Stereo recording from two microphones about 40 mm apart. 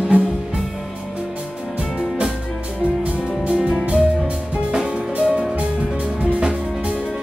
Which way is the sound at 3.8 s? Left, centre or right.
Right.